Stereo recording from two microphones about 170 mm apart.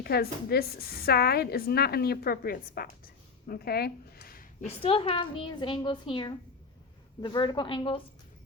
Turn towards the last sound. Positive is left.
turn(degrees=30)  # may be behind; listen again after turning